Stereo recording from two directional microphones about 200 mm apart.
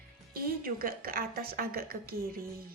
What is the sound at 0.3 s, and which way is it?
Speech, 45° right (ahead or behind).